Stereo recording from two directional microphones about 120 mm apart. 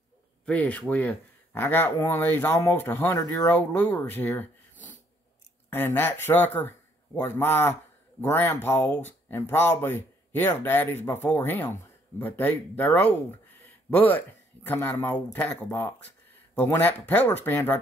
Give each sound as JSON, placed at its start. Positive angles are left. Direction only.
{"t": 0.5, "sound": "speech", "side_deg": 10}
{"t": 3.4, "sound": "speech", "side_deg": 15}
{"t": 5.7, "sound": "speech", "side_deg": 20}